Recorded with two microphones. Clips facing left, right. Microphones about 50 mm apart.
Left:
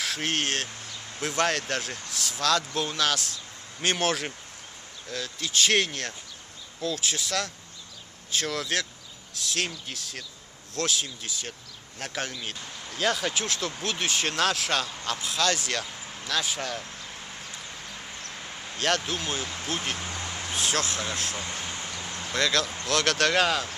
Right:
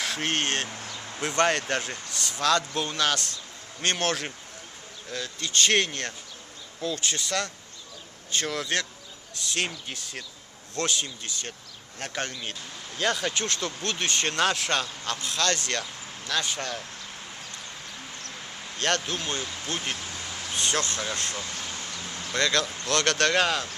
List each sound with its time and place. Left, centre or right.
0.0 s speech: centre
18.8 s speech: centre
21.4 s a sound: left
22.3 s speech: centre